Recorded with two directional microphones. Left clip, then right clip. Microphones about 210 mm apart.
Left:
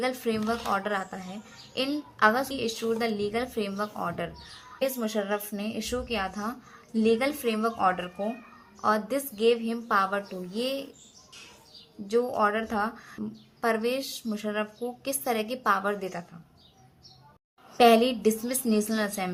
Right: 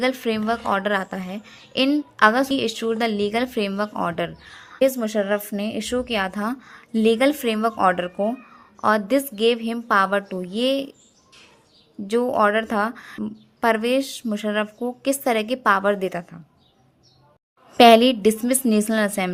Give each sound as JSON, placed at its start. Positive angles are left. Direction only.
{"t": 0.0, "sound": "a woman's voice", "side_deg": -40}
{"t": 12.0, "sound": "a woman's voice", "side_deg": -45}
{"t": 17.7, "sound": "a woman's voice", "side_deg": -40}